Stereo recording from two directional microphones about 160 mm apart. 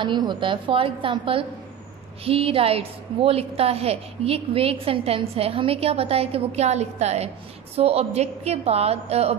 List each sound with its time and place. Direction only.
0.0 s a woman's voice: 30° right (ahead or behind)